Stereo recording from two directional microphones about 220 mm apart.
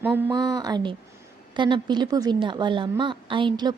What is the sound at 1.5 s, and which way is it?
A woman's voice, 20° right (ahead or behind).